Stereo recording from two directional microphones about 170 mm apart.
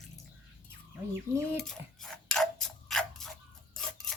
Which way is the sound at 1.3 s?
15° right (ahead or behind).